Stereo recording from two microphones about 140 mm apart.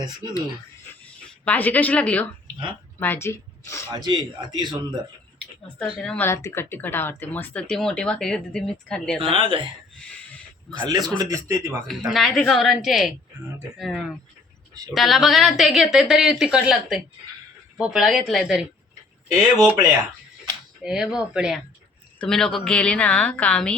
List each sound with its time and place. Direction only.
0.2 s a man's voice: 25° right (ahead or behind)
1.0 s speech: 10° left (ahead or behind)
3.9 s a man's voice: 30° right (ahead or behind)
5.8 s a woman's voice: centre (ahead or behind)
6.2 s speech: 20° left (ahead or behind)
9.3 s a man's voice: 35° right (ahead or behind)
10.8 s a man's voice: 25° right (ahead or behind)
11.9 s a woman's voice: centre (ahead or behind)
20.8 s a woman's voice: 5° right (ahead or behind)